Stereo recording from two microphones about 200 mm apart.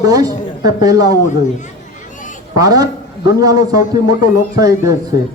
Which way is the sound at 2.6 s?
20° right (ahead or behind).